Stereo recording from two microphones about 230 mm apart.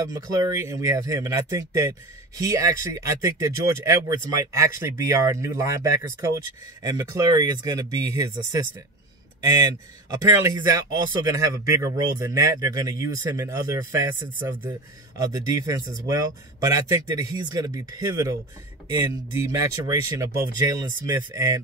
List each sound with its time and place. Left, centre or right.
0.0 s speech: centre
10.2 s speech: centre